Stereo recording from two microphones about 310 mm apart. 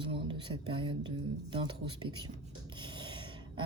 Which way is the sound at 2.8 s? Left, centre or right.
Centre.